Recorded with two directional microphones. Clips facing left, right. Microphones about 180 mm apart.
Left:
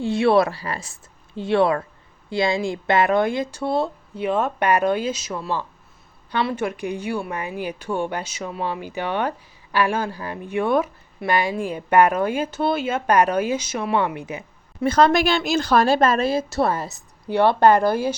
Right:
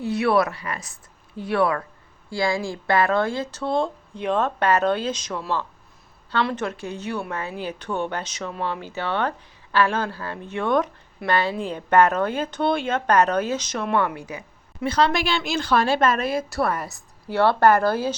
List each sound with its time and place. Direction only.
0.0 s a woman's voice: 25° left (ahead or behind)
14.8 s a woman's voice: 45° left (ahead or behind); by 18.1 s 15° left (ahead or behind)